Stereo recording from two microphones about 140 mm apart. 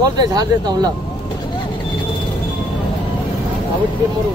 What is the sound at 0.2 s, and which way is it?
Speech, 30° right (ahead or behind).